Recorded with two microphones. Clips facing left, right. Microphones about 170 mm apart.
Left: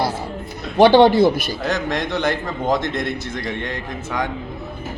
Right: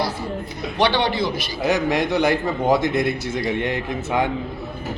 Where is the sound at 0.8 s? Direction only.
45° left (ahead or behind).